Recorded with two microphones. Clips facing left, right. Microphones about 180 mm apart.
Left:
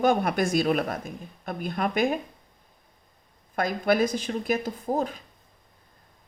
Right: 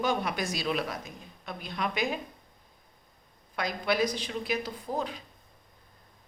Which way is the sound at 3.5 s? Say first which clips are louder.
Left 5 dB; 50° left (ahead or behind).